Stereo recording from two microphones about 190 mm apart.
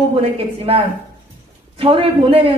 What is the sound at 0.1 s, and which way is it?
Speech, 30° right (ahead or behind).